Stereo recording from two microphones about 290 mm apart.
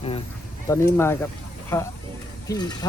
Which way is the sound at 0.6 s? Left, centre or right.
Centre.